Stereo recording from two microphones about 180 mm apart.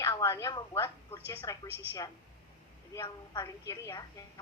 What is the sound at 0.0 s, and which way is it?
A woman's voice, 20° left (ahead or behind).